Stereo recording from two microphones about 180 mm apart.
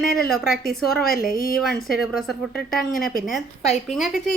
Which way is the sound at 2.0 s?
Centre (ahead or behind).